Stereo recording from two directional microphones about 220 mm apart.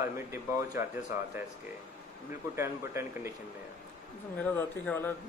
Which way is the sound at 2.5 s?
10° right (ahead or behind).